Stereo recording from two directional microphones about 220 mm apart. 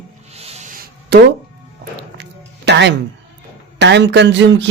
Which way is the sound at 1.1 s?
50° right (ahead or behind).